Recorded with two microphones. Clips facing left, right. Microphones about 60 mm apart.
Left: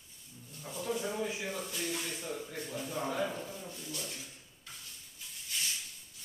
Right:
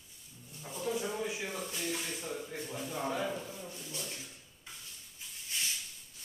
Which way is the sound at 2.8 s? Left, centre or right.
Centre.